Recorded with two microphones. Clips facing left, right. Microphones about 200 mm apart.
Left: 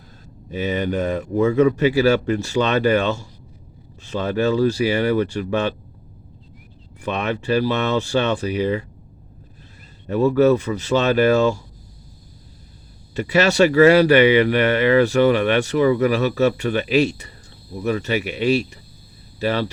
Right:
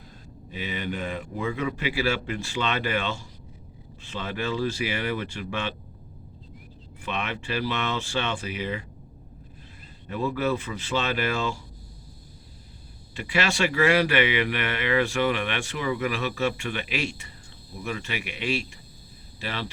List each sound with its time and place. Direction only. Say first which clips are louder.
0.5 s a man's voice: left 10 dB; 45° left (ahead or behind)
7.0 s speech: left 8 dB; 40° left (ahead or behind)
10.1 s speech: left 11 dB; 40° left (ahead or behind)
13.1 s speech: left 10 dB; 40° left (ahead or behind)